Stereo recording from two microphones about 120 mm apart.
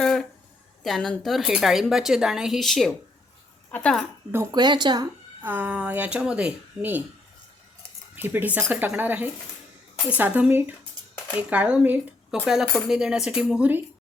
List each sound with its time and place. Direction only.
0.0 s a sound: 5° left (ahead or behind)
0.8 s speech: 5° left (ahead or behind)
4.5 s speech: 40° right (ahead or behind)
5.4 s speech: 15° right (ahead or behind)
8.1 s speech: 15° right (ahead or behind)